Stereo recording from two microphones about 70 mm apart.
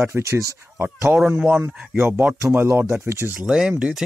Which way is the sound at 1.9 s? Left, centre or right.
Right.